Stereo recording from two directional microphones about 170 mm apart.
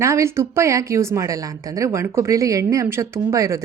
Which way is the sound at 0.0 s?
15° right (ahead or behind).